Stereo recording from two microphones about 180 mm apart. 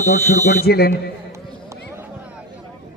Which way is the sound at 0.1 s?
60° left (ahead or behind).